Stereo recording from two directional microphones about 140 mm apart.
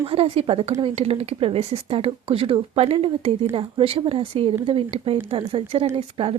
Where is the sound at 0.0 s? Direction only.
40° right (ahead or behind).